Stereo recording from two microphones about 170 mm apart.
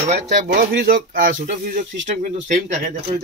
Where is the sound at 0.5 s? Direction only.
55° right (ahead or behind).